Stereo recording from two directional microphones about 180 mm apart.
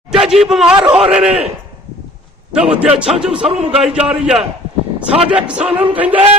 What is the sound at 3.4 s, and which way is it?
Speech, 35° right (ahead or behind).